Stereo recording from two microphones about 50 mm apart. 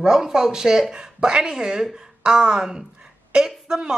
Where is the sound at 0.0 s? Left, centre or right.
Centre.